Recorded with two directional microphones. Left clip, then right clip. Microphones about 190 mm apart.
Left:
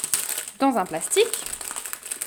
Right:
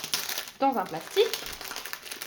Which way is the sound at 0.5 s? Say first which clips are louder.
Left 4 dB; 70° left (ahead or behind).